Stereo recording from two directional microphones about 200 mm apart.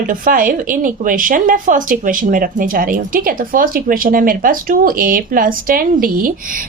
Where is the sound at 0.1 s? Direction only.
40° right (ahead or behind).